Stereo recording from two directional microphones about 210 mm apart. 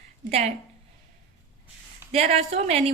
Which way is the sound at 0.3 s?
30° right (ahead or behind).